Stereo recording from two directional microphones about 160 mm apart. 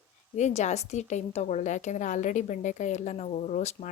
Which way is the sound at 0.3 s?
45° left (ahead or behind).